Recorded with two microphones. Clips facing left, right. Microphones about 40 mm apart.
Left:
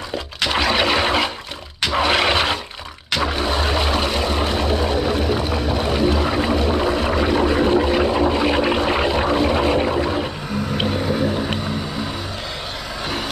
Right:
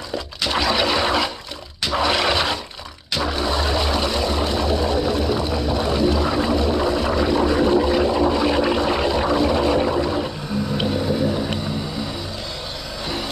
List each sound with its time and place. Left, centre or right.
0.5 s a sound: left
3.2 s vehicle: left
10.8 s vehicle: left